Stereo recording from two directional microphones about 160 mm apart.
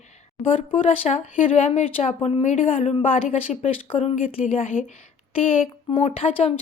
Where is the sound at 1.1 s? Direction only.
45° left (ahead or behind).